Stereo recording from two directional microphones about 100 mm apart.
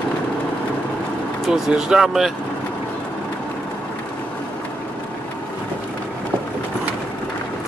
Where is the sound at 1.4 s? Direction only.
5° right (ahead or behind).